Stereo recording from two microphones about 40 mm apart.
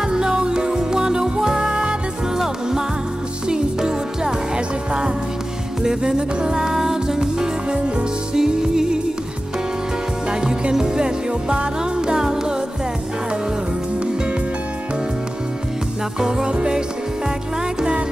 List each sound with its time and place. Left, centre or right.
0.0 s music: centre
10.3 s music: centre
16.2 s music: centre